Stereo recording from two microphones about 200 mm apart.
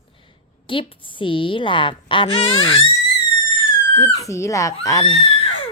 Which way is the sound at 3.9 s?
15° left (ahead or behind).